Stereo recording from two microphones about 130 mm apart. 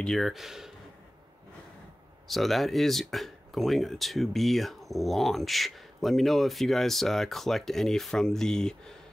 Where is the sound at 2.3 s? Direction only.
Centre (ahead or behind).